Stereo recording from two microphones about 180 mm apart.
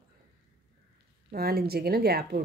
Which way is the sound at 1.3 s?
60° right (ahead or behind).